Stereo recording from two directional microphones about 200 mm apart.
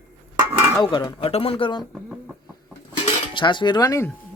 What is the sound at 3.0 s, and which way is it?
Cutlery, 25° left (ahead or behind).